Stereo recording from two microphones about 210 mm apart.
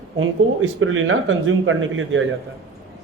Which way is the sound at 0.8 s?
70° right (ahead or behind).